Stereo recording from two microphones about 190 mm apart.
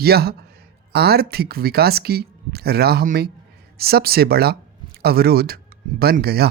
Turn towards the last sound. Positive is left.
turn(degrees=-55)  # may be behind; listen again after turning